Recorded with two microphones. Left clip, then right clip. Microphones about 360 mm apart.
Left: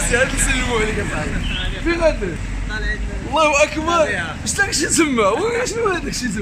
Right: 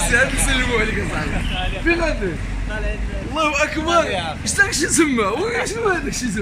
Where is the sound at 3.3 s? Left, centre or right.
Centre.